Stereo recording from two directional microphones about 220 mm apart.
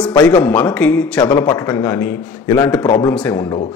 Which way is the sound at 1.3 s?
15° left (ahead or behind).